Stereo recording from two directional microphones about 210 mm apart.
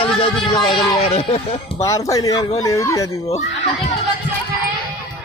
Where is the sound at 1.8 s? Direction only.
15° left (ahead or behind).